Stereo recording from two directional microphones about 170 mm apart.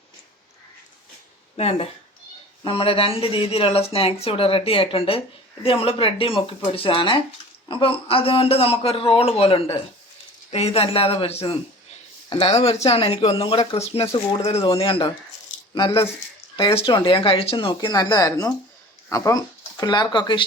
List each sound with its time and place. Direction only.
1.5 s speech: 40° left (ahead or behind)